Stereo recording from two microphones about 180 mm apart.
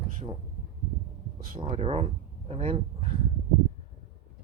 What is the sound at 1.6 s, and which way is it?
Speech, 30° right (ahead or behind).